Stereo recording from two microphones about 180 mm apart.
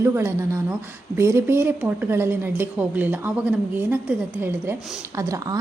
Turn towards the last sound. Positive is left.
turn(degrees=-20)  # may be behind; listen again after turning